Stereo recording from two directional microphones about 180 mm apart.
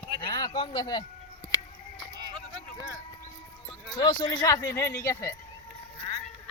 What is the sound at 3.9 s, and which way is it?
Speech, 25° left (ahead or behind).